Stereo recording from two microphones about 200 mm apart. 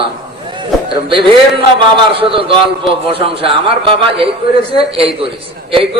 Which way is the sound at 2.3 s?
25° right (ahead or behind).